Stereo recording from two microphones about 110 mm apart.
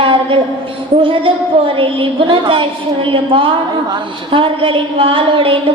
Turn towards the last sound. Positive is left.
turn(degrees=-55)  # may be behind; listen again after turning